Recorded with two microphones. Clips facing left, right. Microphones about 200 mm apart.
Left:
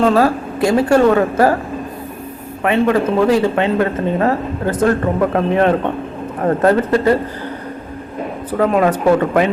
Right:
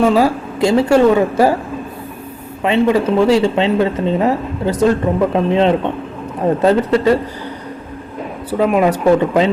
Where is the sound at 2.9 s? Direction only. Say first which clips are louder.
Right 2 dB; 10° right (ahead or behind).